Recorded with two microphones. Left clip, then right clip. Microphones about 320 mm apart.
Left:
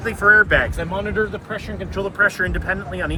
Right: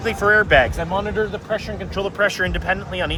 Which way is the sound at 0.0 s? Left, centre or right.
Right.